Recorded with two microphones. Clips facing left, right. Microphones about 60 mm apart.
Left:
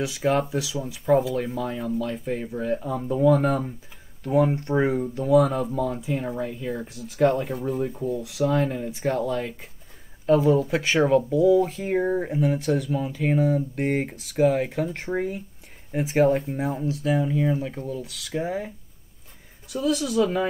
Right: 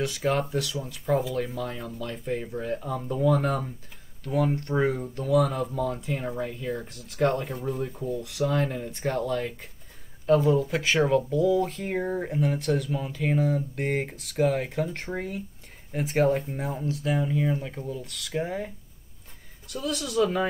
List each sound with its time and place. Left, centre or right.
0.0 s speech: centre
4.2 s speech: centre
19.7 s speech: centre